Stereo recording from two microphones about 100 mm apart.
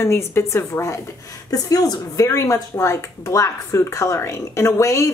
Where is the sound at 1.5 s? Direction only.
40° left (ahead or behind).